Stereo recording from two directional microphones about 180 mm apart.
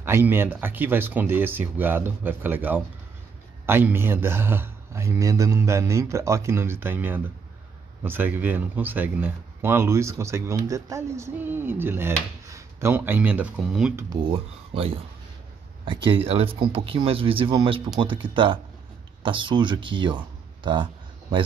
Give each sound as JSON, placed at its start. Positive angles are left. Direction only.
{"t": 0.0, "sound": "speech", "side_deg": -10}
{"t": 14.7, "sound": "speech", "side_deg": -30}